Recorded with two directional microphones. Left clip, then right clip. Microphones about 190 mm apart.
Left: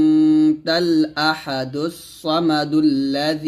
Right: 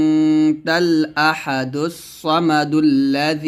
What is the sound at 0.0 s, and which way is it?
Speech, 20° right (ahead or behind).